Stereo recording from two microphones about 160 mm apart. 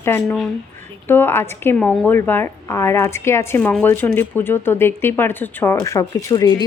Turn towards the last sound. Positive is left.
turn(degrees=25)  # may be behind; listen again after turning